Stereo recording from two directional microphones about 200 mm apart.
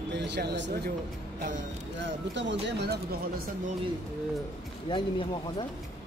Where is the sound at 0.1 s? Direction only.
60° right (ahead or behind).